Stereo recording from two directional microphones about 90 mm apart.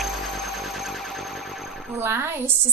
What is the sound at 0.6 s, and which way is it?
Music, centre (ahead or behind).